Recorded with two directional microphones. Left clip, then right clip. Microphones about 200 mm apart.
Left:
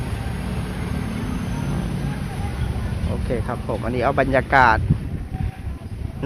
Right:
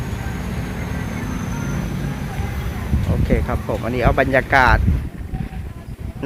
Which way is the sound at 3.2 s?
10° right (ahead or behind).